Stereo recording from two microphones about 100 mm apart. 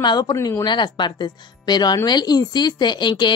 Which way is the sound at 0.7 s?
50° left (ahead or behind).